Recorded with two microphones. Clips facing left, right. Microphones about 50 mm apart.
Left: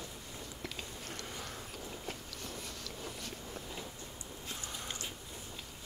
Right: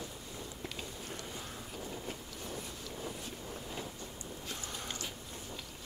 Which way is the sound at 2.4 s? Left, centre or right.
Left.